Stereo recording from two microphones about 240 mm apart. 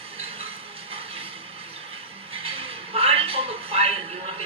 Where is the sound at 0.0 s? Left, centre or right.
Right.